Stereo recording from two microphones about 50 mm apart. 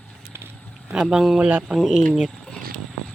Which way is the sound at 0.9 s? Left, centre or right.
Centre.